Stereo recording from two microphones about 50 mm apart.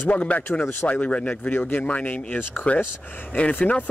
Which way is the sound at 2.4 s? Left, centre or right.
Left.